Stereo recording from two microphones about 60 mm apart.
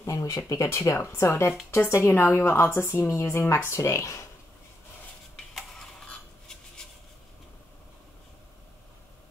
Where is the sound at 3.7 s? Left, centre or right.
Left.